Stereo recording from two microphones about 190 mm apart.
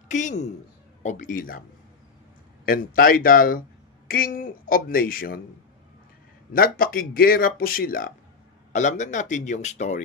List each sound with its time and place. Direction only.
0.1 s a man's voice: 40° left (ahead or behind)
2.6 s a man's voice: 50° left (ahead or behind)
6.5 s a man's voice: 50° left (ahead or behind)